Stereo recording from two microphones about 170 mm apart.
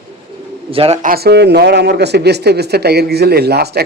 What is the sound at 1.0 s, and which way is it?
Speech, 65° right (ahead or behind).